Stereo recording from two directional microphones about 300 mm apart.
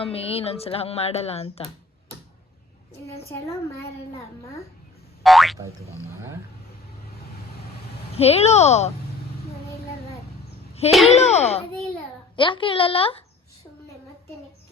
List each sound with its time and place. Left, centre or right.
0.0 s speech: centre
5.2 s boing: centre
8.1 s speech: centre
10.9 s speech: centre
11.3 s a woman's voice: left